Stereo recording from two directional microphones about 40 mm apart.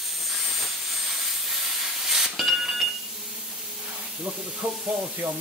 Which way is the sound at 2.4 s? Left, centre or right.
Centre.